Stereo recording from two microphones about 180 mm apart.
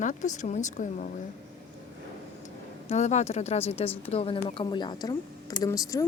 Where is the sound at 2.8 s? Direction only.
40° left (ahead or behind).